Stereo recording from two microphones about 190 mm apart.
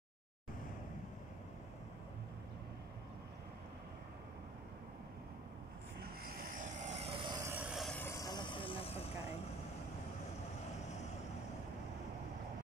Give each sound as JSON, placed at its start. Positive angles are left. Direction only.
{"t": 6.6, "sound": "vehicle", "side_deg": -40}
{"t": 7.4, "sound": "vehicle", "side_deg": -5}
{"t": 8.0, "sound": "vehicle", "side_deg": 15}